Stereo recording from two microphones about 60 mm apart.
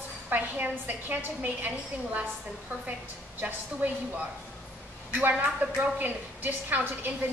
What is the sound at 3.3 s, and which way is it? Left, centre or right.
Speech, right.